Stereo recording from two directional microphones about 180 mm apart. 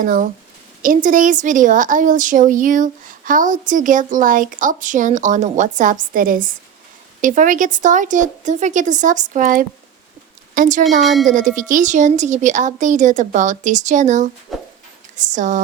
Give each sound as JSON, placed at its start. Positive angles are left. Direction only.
{"t": 0.0, "sound": "a woman's voice", "side_deg": -50}
{"t": 11.0, "sound": "speech", "side_deg": 0}
{"t": 11.3, "sound": "a woman's voice", "side_deg": -45}
{"t": 14.5, "sound": "a sound", "side_deg": 0}
{"t": 15.3, "sound": "a woman's voice", "side_deg": -45}